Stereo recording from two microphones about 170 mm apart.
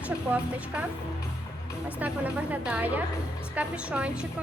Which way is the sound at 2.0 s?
10° right (ahead or behind).